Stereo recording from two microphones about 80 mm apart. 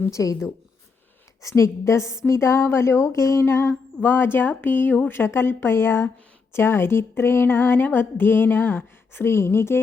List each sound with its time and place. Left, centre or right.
0.1 s speech: left
1.4 s a woman's voice: left